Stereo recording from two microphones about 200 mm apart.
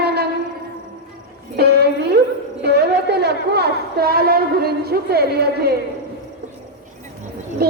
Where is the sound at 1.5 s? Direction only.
55° right (ahead or behind).